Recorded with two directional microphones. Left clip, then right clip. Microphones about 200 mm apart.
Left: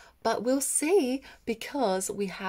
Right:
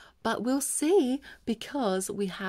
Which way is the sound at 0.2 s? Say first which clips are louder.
Left 2 dB; 40° right (ahead or behind).